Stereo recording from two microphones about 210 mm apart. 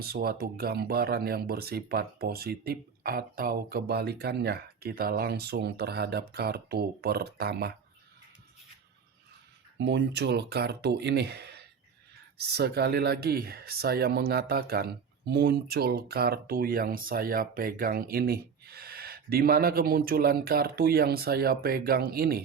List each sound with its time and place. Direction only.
0.0 s speech: 45° right (ahead or behind)
9.7 s speech: 55° right (ahead or behind)